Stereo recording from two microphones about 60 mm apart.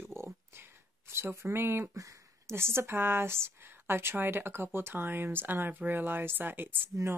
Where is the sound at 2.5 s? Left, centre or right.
Right.